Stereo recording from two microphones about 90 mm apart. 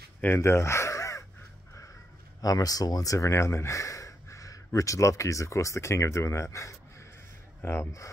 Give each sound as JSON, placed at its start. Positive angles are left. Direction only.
{"t": 0.4, "sound": "gasp", "side_deg": 30}
{"t": 2.4, "sound": "speech", "side_deg": 45}